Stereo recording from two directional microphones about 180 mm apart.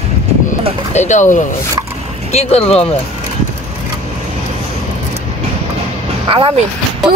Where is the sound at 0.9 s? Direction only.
40° left (ahead or behind).